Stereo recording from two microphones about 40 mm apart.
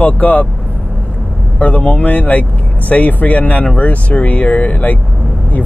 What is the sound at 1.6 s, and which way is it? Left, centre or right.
Speech, left.